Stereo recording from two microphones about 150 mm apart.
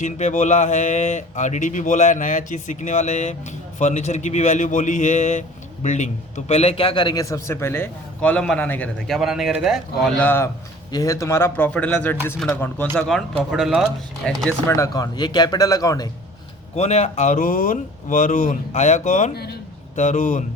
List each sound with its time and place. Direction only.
0.0 s a man's voice: 50° left (ahead or behind); by 8.9 s 10° left (ahead or behind)
9.0 s a man's voice: centre (ahead or behind)
10.2 s a man's voice: 15° left (ahead or behind)
14.7 s speech: 20° left (ahead or behind)
16.7 s speech: 45° left (ahead or behind)